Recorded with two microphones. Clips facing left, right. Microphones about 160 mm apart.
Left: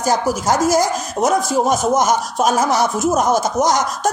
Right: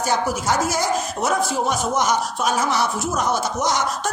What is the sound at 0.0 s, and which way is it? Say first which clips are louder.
Speech: left 4 dB; 40° left (ahead or behind).